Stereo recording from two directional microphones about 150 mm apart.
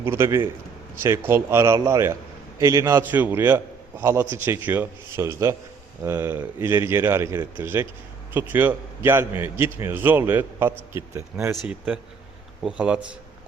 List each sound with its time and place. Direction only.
0.0 s a man's voice: 15° right (ahead or behind)
11.6 s a man's voice: 5° right (ahead or behind)